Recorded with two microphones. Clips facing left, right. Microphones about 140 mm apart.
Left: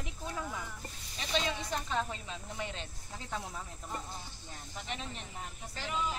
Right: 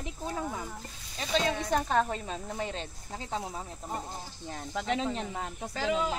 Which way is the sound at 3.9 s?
45° right (ahead or behind).